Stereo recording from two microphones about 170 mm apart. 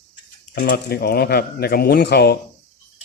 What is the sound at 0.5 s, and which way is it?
Speech, 65° left (ahead or behind).